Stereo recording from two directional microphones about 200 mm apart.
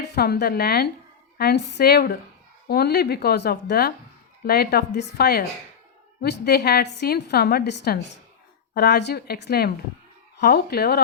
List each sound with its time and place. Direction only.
0.0 s a woman's voice: 55° left (ahead or behind)